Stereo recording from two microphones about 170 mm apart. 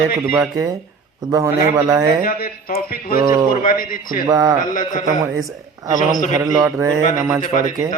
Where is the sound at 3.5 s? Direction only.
55° left (ahead or behind).